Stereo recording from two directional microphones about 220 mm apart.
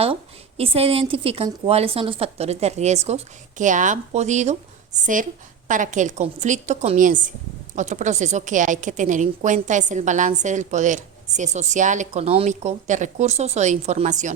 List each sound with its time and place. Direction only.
0.0 s a woman's voice: 25° right (ahead or behind)